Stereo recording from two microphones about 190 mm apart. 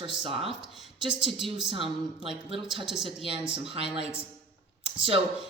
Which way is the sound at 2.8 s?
Centre (ahead or behind).